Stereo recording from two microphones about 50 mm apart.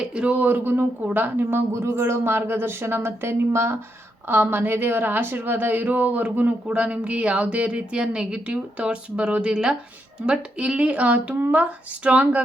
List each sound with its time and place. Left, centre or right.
0.0 s a woman's voice: centre
0.3 s a woman's voice: right
1.5 s speech: right
4.3 s a woman's voice: right
8.0 s a woman's voice: centre; by 12.4 s right